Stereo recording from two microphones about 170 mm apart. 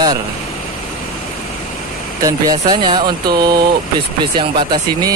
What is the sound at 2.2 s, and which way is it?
Speech, 25° right (ahead or behind).